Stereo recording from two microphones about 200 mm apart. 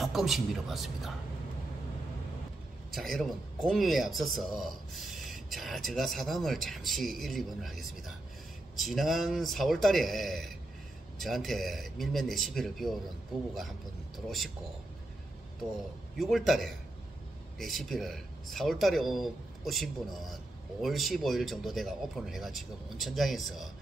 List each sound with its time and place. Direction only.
0.0 s speech: centre (ahead or behind)
2.9 s speech: centre (ahead or behind)
14.1 s speech: centre (ahead or behind)
16.2 s speech: centre (ahead or behind)